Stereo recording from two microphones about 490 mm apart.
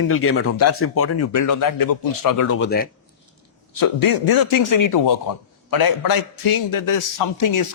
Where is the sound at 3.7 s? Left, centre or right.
Left.